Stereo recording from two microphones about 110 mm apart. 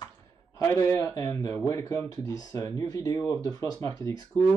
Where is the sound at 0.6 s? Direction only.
25° left (ahead or behind).